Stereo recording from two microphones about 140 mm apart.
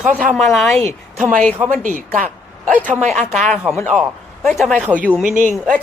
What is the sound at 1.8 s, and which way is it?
Speech, 80° right.